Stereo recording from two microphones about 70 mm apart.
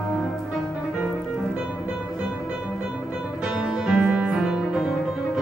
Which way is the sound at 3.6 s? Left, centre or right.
Centre.